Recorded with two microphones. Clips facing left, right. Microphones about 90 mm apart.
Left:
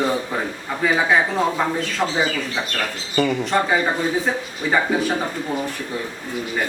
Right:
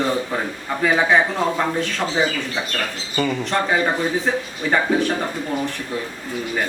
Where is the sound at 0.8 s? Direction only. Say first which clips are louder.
Right 1 dB; centre (ahead or behind).